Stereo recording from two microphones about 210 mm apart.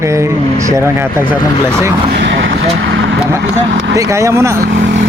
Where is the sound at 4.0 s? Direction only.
15° right (ahead or behind).